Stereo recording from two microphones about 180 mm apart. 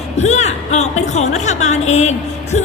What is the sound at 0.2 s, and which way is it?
A woman's voice, 40° left (ahead or behind).